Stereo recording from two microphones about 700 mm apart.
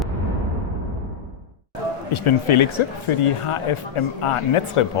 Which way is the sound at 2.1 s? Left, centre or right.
Left.